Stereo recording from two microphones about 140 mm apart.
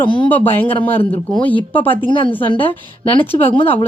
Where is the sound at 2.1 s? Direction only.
35° left (ahead or behind).